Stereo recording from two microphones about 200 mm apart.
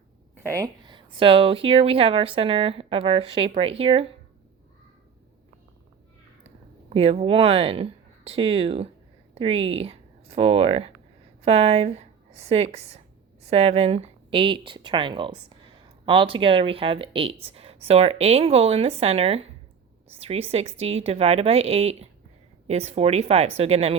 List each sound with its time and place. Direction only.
0.4 s speech: 15° right (ahead or behind)
6.9 s a woman's voice: 30° right (ahead or behind)